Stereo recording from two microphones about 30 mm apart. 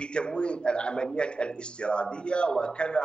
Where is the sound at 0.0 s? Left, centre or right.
Left.